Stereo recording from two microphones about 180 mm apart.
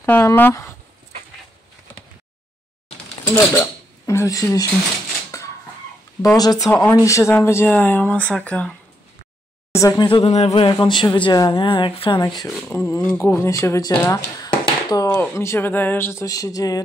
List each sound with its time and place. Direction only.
0.0 s speech: 15° left (ahead or behind)
3.3 s speech: 15° left (ahead or behind)
5.3 s a sound: 15° left (ahead or behind)
6.3 s speech: 20° left (ahead or behind)
9.8 s speech: 20° left (ahead or behind)
12.7 s speech: 15° left (ahead or behind)